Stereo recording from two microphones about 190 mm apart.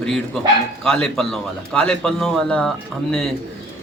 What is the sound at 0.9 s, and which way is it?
A man's voice, centre (ahead or behind).